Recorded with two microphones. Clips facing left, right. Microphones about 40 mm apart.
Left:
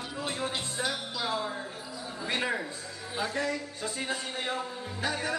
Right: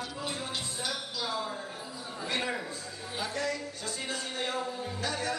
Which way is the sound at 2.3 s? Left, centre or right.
Left.